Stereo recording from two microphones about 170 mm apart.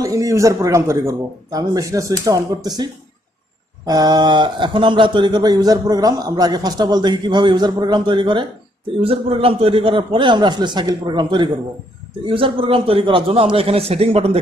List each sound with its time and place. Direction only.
0.0 s a man's voice: 20° right (ahead or behind); by 14.4 s 35° right (ahead or behind)